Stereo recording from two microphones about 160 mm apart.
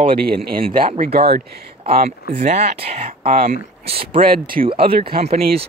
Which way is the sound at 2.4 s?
50° right (ahead or behind).